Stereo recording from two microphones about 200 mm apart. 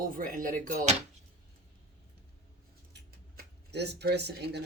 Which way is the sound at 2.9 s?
55° right (ahead or behind).